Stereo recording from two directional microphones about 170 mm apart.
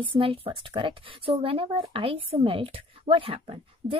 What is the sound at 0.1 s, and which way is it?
A woman's voice, 30° right (ahead or behind).